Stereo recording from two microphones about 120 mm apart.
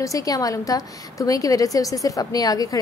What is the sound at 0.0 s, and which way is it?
A woman's voice, 30° left (ahead or behind).